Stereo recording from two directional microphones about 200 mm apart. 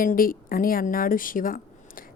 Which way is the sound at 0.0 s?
45° left (ahead or behind).